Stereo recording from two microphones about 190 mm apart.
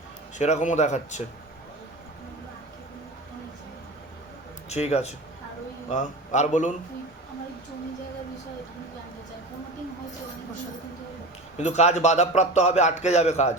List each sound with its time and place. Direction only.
0.3 s a man's voice: 40° left (ahead or behind)
4.7 s a man's voice: 35° left (ahead or behind)
11.5 s a man's voice: 35° left (ahead or behind)